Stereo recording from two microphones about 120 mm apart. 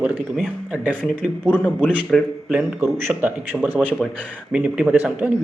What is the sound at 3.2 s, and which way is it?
Speech, 15° right (ahead or behind).